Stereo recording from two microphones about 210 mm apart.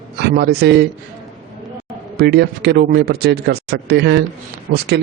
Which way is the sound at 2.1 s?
50° right (ahead or behind).